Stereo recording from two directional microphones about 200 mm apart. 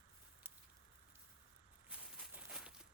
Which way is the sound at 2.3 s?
5° right (ahead or behind).